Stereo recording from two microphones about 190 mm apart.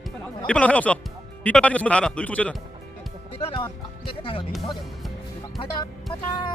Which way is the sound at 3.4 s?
25° left (ahead or behind).